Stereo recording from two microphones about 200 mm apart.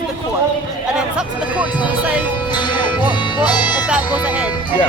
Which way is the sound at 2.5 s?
20° left (ahead or behind).